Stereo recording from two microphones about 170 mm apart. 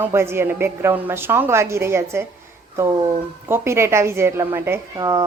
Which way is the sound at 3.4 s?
15° right (ahead or behind).